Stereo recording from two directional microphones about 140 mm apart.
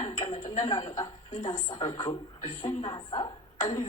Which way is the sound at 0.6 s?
30° left (ahead or behind).